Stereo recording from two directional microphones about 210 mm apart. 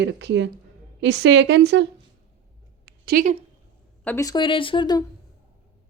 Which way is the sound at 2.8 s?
50° right (ahead or behind).